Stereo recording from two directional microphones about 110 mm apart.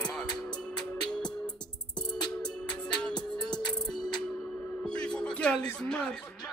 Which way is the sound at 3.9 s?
40° left (ahead or behind).